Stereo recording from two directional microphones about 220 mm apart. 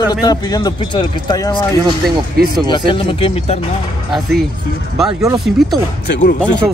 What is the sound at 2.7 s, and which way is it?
Speech, 25° left (ahead or behind).